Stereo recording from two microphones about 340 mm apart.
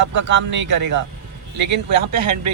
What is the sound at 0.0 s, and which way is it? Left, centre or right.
Speech, right.